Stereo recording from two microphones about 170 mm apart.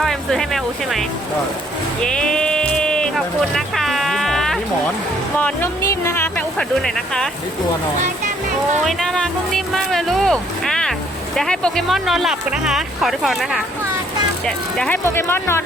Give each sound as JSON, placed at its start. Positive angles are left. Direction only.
{"t": 0.0, "sound": "speech", "side_deg": 0}
{"t": 2.0, "sound": "a sound", "side_deg": 5}
{"t": 5.4, "sound": "speech", "side_deg": 10}
{"t": 8.8, "sound": "speech", "side_deg": 0}